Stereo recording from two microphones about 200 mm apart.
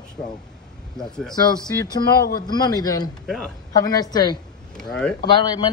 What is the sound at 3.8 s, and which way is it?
Speech, 20° left (ahead or behind).